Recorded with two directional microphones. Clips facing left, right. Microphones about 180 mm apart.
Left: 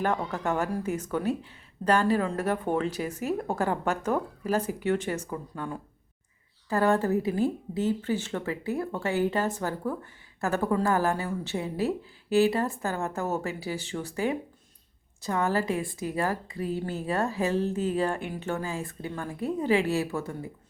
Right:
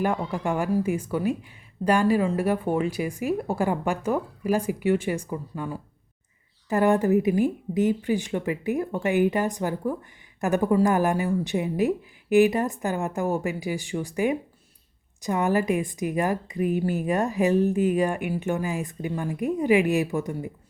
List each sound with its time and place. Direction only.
0.0 s speech: 10° right (ahead or behind)